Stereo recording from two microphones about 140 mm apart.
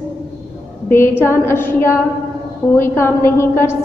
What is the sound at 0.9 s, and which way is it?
Female singing, 15° left (ahead or behind).